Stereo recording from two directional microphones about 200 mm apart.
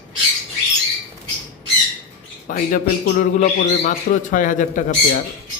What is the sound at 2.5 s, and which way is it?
A man's voice, 40° left (ahead or behind).